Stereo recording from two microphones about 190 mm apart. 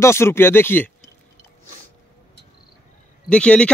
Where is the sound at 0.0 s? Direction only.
15° left (ahead or behind).